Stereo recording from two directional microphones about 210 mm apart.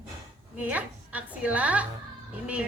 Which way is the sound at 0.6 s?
5° right (ahead or behind).